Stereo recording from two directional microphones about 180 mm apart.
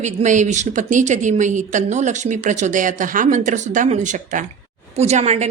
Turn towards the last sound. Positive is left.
turn(degrees=-40)  # may be behind; listen again after turning